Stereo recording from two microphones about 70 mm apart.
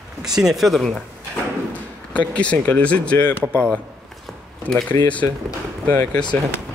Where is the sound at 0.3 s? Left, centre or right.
Centre.